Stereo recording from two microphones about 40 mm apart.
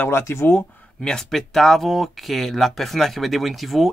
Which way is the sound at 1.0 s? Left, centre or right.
Centre.